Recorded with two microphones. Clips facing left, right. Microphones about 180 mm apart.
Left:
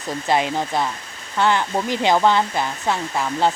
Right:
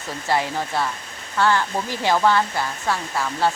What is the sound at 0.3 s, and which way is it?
Speech, 20° left (ahead or behind).